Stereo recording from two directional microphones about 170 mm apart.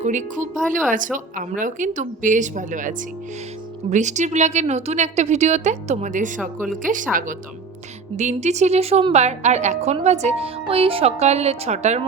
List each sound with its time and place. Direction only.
0.0 s a woman's voice: 45° right (ahead or behind)